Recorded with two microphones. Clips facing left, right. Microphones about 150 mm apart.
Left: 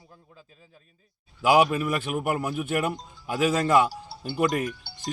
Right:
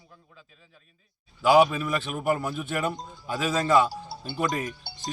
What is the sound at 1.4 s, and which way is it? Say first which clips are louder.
Speech: right 1 dB; 10° left (ahead or behind).